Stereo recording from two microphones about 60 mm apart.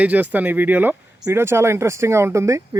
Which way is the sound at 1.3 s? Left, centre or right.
Right.